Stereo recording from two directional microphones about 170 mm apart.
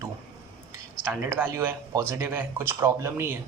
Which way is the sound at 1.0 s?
10° right (ahead or behind).